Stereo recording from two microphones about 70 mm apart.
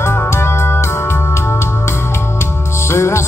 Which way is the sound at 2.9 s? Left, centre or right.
Left.